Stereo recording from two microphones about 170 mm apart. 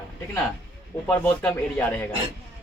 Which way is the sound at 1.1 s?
10° left (ahead or behind).